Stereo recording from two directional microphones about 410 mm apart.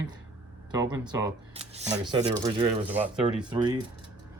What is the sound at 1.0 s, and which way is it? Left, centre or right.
Speech, centre.